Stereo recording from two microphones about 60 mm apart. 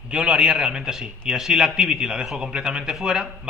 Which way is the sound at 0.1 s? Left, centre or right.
Centre.